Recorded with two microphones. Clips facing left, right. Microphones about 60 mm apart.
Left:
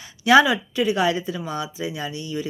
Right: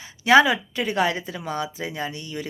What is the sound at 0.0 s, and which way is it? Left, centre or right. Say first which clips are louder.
Speech: left 1 dB; right.